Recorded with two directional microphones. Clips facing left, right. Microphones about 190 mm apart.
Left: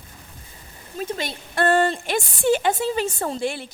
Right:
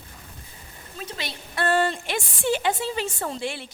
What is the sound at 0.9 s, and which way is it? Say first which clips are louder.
Speech: left 7 dB; 45° left (ahead or behind).